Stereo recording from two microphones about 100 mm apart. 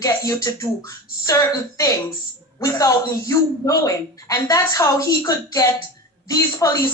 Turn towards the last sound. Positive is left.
turn(degrees=35)  # may be behind; listen again after turning